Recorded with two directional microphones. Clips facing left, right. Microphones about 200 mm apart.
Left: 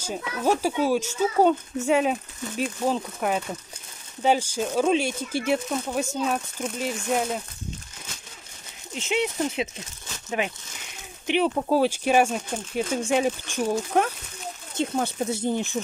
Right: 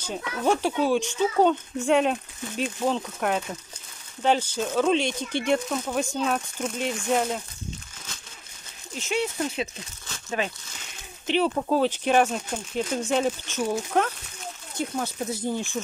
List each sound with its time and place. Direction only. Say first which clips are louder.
0.0 s speech: even; 5° left (ahead or behind)
8.9 s speech: left 2 dB; 20° left (ahead or behind)
14.8 s speech: left 3 dB; 25° left (ahead or behind)